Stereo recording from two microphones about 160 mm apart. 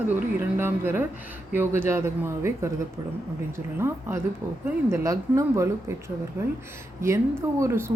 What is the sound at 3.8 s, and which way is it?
Speech, 15° right (ahead or behind).